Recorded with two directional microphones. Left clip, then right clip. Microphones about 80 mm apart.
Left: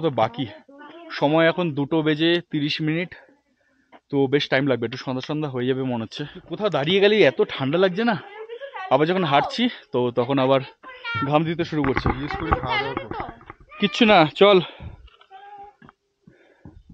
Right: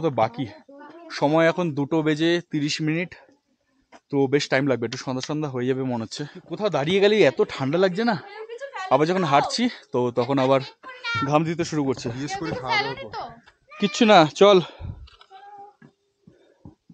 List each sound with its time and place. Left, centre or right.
0.0 s speech: centre
8.3 s a sound: right
8.9 s speech: centre
10.7 s a sound: right
11.2 s speech: centre
12.3 s a child's voice: right
13.7 s speech: centre